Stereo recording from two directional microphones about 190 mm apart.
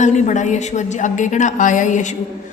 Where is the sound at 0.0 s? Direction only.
40° left (ahead or behind).